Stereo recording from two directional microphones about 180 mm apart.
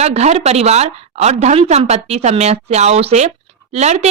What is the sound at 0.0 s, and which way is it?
A woman's voice, 40° right (ahead or behind).